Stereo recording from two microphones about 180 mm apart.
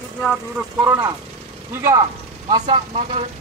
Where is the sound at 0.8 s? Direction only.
20° right (ahead or behind).